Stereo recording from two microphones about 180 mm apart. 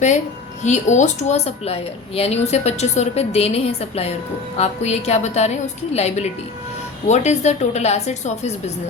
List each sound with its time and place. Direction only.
0.6 s speech: 40° left (ahead or behind)